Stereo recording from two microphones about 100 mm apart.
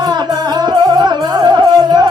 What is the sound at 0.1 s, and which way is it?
Music, 45° right (ahead or behind).